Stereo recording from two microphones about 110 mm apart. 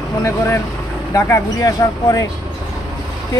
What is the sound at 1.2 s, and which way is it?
Speech, 30° left (ahead or behind).